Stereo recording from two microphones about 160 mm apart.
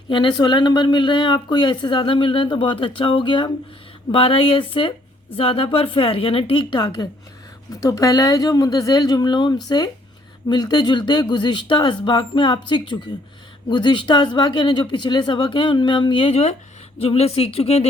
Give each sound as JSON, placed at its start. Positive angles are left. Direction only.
{"t": 0.1, "sound": "a woman's voice", "side_deg": 30}